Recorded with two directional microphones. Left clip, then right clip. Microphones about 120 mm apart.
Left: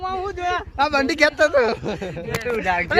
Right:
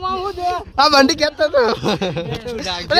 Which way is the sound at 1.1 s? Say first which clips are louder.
Left 1 dB; 15° left (ahead or behind).